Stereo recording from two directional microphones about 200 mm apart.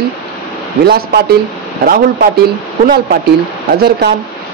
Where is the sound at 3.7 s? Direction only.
50° right (ahead or behind).